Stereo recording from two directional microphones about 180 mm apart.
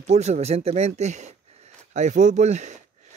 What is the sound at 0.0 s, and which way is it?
Speech, 40° right (ahead or behind).